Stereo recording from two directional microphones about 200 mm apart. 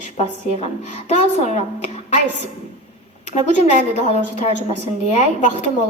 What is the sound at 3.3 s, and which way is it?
A woman's voice, 35° left (ahead or behind).